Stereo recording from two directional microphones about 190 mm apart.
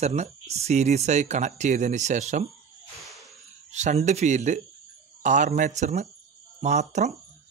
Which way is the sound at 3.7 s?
35° right (ahead or behind).